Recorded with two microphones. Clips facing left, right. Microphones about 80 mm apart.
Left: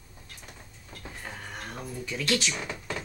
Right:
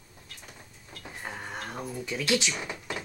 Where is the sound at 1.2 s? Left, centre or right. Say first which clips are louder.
Right 4 dB; centre.